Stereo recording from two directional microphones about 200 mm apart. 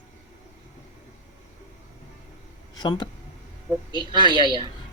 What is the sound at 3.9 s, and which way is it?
Speech, 25° right (ahead or behind).